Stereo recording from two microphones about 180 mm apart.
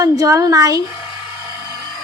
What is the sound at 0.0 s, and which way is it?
Speech, 20° right (ahead or behind).